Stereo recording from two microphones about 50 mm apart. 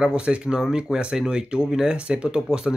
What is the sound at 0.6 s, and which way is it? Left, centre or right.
Speech, centre.